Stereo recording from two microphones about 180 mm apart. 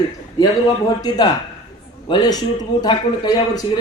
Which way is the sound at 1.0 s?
20° left (ahead or behind).